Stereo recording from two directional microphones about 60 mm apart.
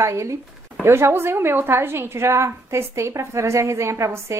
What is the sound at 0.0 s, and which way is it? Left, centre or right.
Speech, right.